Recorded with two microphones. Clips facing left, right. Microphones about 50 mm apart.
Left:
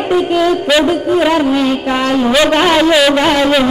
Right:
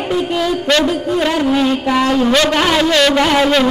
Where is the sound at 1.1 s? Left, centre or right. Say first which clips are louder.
Left 3 dB; centre.